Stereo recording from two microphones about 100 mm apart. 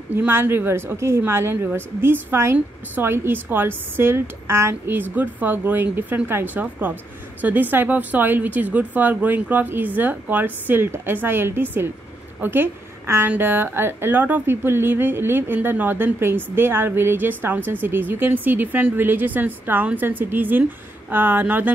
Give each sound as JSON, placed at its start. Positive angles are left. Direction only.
{"t": 0.1, "sound": "a woman's voice", "side_deg": -20}